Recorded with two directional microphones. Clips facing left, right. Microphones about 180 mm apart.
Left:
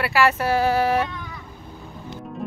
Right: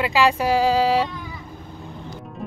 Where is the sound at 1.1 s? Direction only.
5° right (ahead or behind).